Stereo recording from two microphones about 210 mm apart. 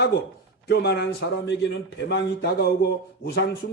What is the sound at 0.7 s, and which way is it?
A man's voice, 50° left (ahead or behind).